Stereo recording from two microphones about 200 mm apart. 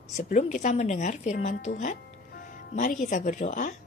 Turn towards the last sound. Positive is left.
turn(degrees=40)  # may be behind; listen again after turning